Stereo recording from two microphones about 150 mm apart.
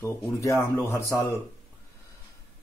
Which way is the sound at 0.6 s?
15° left (ahead or behind).